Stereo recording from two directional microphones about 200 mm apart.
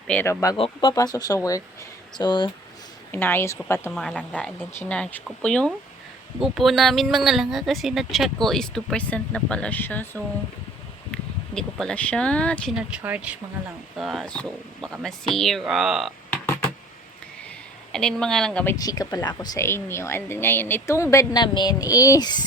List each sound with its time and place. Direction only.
0.1 s speech: 10° left (ahead or behind)
0.5 s speech: 25° left (ahead or behind)
3.1 s speech: 10° left (ahead or behind)
3.9 s speech: centre (ahead or behind)
11.1 s speech: 5° left (ahead or behind)
12.7 s speech: 5° right (ahead or behind)
17.9 s speech: 5° left (ahead or behind); by 22.4 s 20° left (ahead or behind)